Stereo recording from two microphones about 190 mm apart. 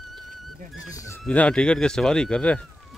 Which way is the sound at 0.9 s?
15° left (ahead or behind).